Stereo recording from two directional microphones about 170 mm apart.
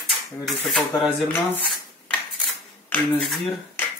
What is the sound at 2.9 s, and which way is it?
Speech, 10° left (ahead or behind).